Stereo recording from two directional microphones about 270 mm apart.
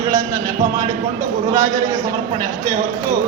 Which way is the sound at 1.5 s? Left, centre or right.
Centre.